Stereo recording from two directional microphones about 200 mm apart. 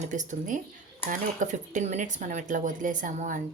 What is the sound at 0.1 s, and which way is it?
A woman's voice, 40° right (ahead or behind).